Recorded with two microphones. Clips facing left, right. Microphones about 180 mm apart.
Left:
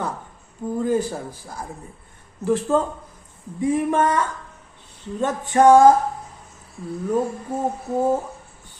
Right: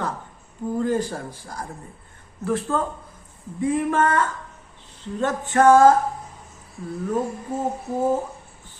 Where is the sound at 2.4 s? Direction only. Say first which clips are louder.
Left 4 dB; 20° left (ahead or behind).